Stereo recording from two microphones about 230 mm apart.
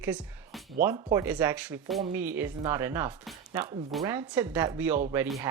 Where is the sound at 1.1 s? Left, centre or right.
Centre.